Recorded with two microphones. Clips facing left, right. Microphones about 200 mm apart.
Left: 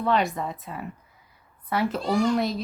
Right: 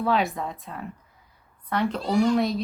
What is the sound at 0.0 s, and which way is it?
Speech, centre (ahead or behind).